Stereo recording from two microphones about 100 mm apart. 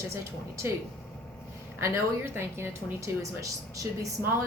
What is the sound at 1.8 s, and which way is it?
A woman's voice, 25° right (ahead or behind).